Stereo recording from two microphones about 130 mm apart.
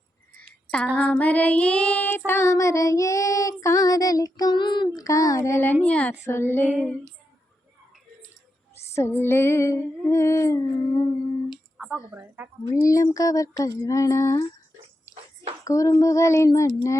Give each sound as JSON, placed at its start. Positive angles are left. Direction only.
{"t": 0.9, "sound": "child singing", "side_deg": 10}
{"t": 5.8, "sound": "female singing", "side_deg": 10}
{"t": 6.7, "sound": "female singing", "side_deg": -10}
{"t": 9.0, "sound": "child singing", "side_deg": 20}
{"t": 11.8, "sound": "a sound", "side_deg": 0}
{"t": 12.1, "sound": "female singing", "side_deg": -15}
{"t": 12.7, "sound": "child singing", "side_deg": 25}
{"t": 15.6, "sound": "child singing", "side_deg": 25}